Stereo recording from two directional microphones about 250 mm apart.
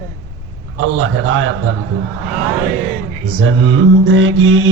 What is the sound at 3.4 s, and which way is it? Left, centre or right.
A man's voice, right.